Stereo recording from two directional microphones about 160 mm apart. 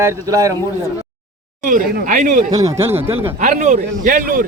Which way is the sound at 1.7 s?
55° right (ahead or behind).